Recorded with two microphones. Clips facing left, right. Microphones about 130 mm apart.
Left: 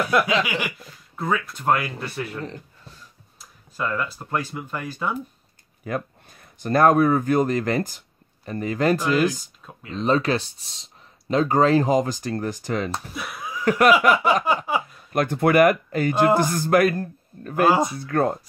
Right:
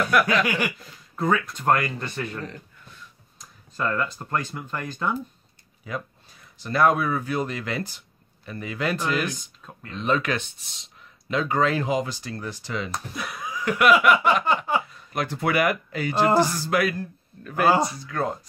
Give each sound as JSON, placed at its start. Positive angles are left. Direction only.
{"t": 0.1, "sound": "chuckle", "side_deg": 25}
{"t": 0.6, "sound": "speech", "side_deg": 5}
{"t": 2.4, "sound": "a sound", "side_deg": 30}
{"t": 3.3, "sound": "speech", "side_deg": 5}
{"t": 5.9, "sound": "speech", "side_deg": 55}
{"t": 13.1, "sound": "a sound", "side_deg": 5}
{"t": 13.7, "sound": "speech", "side_deg": 40}
{"t": 14.5, "sound": "a sound", "side_deg": 5}
{"t": 15.1, "sound": "speech", "side_deg": 50}
{"t": 17.6, "sound": "speech", "side_deg": 0}
{"t": 17.9, "sound": "speech", "side_deg": 55}